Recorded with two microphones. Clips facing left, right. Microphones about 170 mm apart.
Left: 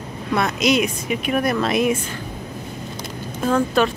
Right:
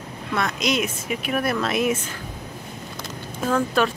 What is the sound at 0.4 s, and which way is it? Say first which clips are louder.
Speech: left 5 dB; centre (ahead or behind).